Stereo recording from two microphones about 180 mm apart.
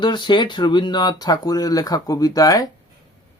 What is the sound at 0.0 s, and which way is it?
Speech, 25° left (ahead or behind).